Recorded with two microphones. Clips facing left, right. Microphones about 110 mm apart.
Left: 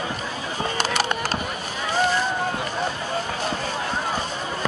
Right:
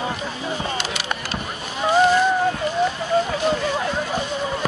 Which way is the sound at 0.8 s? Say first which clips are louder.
Left 5 dB; 45° left (ahead or behind).